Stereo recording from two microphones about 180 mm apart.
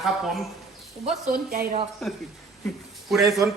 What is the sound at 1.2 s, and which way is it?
Speech, 50° right (ahead or behind).